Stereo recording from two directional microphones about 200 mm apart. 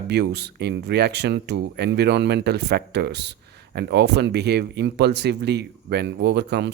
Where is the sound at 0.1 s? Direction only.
55° right (ahead or behind).